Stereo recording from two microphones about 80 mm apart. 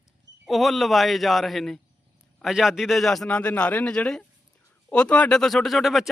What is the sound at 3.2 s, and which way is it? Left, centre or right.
A man's voice, centre.